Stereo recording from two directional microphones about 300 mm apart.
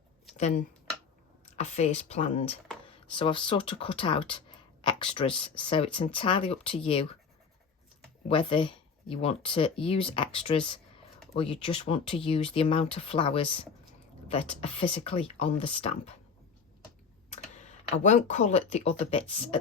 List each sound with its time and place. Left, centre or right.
0.3 s speech: left
8.3 s speech: centre
17.3 s speech: left